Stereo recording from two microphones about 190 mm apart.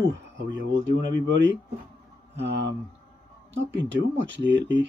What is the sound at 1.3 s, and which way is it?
Speech, 75° right (ahead or behind).